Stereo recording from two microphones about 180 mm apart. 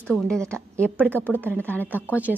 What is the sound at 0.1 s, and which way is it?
Speech, 5° left (ahead or behind).